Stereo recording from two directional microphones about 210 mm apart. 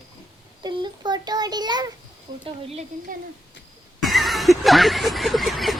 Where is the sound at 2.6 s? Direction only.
30° right (ahead or behind).